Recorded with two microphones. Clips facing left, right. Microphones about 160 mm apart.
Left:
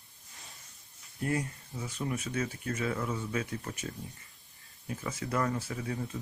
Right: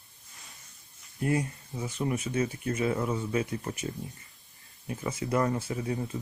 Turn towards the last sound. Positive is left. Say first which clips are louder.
# right 4 dB
turn(degrees=-20)  # may be behind; listen again after turning